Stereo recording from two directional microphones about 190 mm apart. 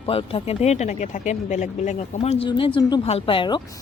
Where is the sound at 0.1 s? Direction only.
30° left (ahead or behind).